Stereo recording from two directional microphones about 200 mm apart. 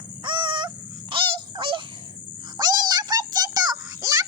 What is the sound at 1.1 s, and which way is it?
Goose, 25° right (ahead or behind).